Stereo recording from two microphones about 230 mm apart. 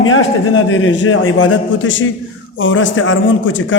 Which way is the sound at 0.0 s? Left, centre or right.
Left.